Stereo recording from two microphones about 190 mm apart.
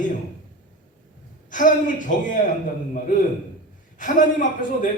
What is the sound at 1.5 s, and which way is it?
Speech, 45° left (ahead or behind).